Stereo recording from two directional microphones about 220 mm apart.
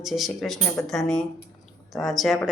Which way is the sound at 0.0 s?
Centre (ahead or behind).